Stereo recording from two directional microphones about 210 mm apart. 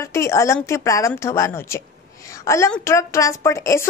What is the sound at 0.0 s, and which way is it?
A woman's voice, 15° left (ahead or behind).